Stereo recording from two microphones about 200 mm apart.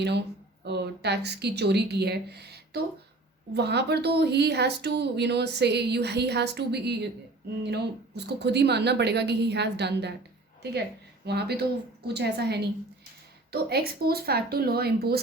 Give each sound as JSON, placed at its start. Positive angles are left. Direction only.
{"t": 0.0, "sound": "a woman's voice", "side_deg": -55}
{"t": 11.3, "sound": "speech", "side_deg": -55}